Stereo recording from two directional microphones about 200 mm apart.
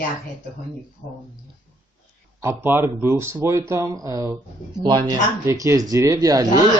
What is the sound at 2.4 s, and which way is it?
Speech, 10° right (ahead or behind).